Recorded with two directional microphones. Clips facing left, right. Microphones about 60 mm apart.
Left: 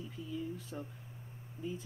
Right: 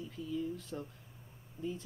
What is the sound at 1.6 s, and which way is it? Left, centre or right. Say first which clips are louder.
Speech: right 2 dB; left.